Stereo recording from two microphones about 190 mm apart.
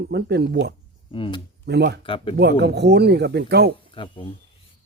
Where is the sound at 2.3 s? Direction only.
60° right (ahead or behind).